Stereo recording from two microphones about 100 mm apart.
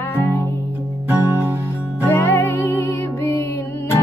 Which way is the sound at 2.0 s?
25° left (ahead or behind).